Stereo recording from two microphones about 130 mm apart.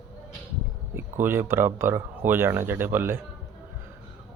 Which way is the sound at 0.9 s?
15° right (ahead or behind).